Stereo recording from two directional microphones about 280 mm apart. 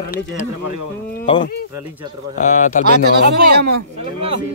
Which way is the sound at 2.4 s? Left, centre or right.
Left.